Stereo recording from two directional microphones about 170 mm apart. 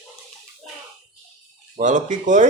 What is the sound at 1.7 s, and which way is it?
Speech, 45° right (ahead or behind).